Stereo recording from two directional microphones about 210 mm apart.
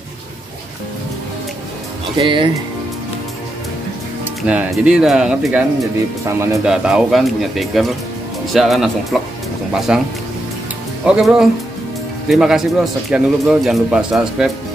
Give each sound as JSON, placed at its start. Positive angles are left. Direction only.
{"t": 2.1, "sound": "speech", "side_deg": -25}
{"t": 4.5, "sound": "speech", "side_deg": -5}
{"t": 11.1, "sound": "speech", "side_deg": -5}